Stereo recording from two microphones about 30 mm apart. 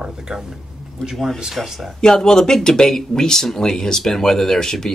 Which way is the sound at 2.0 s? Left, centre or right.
Centre.